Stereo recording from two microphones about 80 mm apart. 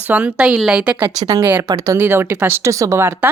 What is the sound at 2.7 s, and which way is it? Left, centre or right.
Speech, right.